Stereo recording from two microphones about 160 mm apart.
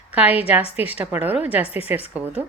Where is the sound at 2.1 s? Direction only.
10° right (ahead or behind).